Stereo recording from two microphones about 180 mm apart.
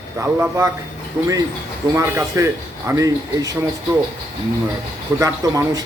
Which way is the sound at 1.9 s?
15° right (ahead or behind).